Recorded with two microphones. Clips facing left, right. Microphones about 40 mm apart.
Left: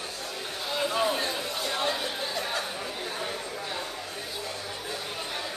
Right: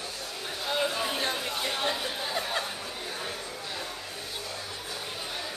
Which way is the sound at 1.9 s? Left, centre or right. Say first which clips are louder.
Left 1 dB; right.